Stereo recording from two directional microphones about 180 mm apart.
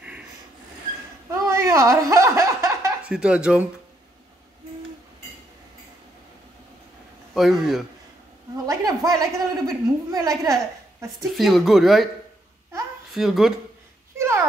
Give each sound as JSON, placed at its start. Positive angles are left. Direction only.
{"t": 1.3, "sound": "a sound", "side_deg": -15}
{"t": 3.1, "sound": "speech", "side_deg": -5}
{"t": 7.3, "sound": "speech", "side_deg": 0}
{"t": 8.6, "sound": "a woman's voice", "side_deg": -20}
{"t": 11.1, "sound": "speech", "side_deg": 0}
{"t": 13.1, "sound": "speech", "side_deg": 0}
{"t": 14.1, "sound": "a sound", "side_deg": -15}